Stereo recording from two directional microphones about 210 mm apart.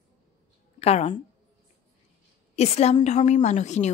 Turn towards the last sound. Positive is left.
turn(degrees=35)  # may be behind; listen again after turning